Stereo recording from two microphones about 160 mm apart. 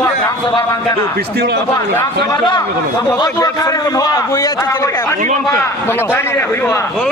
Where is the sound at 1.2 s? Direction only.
80° right.